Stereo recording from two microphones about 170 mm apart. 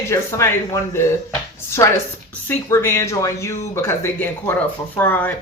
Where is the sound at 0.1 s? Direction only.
15° left (ahead or behind).